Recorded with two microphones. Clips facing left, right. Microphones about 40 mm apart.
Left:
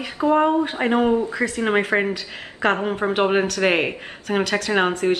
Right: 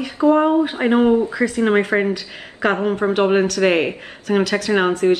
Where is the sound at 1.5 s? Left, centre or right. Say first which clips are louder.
Right 3 dB; centre.